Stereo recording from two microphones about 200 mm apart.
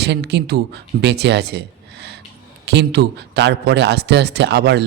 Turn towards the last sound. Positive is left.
turn(degrees=-55)  # may be behind; listen again after turning